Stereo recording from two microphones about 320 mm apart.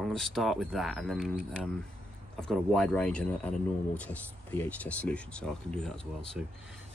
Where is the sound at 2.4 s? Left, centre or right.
Centre.